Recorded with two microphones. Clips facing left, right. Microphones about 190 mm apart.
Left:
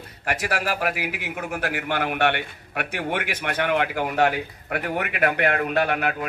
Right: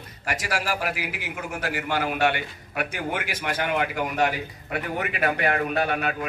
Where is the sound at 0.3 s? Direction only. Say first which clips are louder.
Left 2 dB; 60° left (ahead or behind).